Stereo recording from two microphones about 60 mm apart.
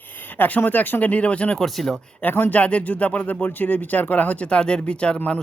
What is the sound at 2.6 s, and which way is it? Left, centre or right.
Speech, left.